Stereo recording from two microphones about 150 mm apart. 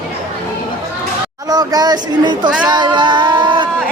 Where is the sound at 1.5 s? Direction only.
25° right (ahead or behind).